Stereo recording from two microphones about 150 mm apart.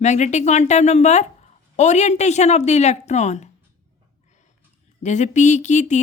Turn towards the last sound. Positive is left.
turn(degrees=55)  # may be behind; listen again after turning